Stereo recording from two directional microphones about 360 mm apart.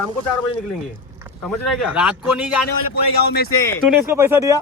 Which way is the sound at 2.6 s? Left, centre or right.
Left.